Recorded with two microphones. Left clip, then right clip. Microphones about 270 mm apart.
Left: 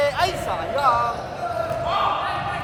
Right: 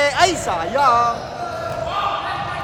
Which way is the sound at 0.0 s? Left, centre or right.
Right.